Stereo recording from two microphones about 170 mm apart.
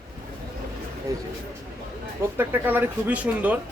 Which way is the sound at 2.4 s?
10° right (ahead or behind).